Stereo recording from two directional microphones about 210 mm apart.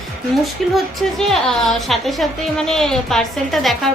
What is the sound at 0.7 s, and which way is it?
A woman's voice, centre (ahead or behind).